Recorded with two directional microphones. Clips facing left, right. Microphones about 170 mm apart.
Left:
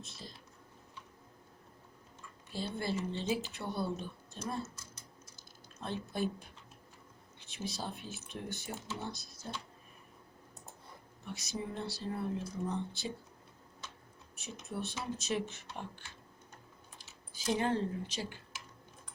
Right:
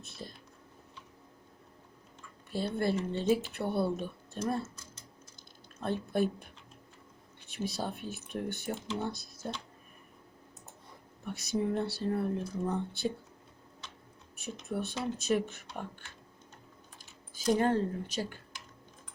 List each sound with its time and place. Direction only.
0.0 s speech: 55° right (ahead or behind)
2.5 s speech: 55° right (ahead or behind)
5.8 s speech: 55° right (ahead or behind)
7.4 s speech: 55° right (ahead or behind)
11.3 s speech: 55° right (ahead or behind)
14.7 s speech: 55° right (ahead or behind)
17.5 s speech: 50° right (ahead or behind)